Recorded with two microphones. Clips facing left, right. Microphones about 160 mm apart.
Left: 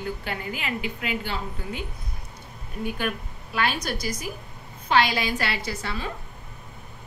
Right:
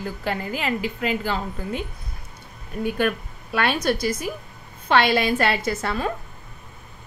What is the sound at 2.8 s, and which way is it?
A woman's voice, 60° right (ahead or behind).